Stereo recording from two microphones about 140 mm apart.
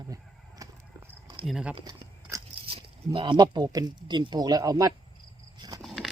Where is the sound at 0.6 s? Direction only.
25° right (ahead or behind).